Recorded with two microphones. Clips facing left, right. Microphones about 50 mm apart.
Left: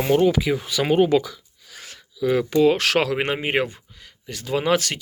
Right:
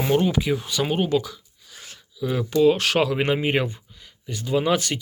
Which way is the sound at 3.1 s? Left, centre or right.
Left.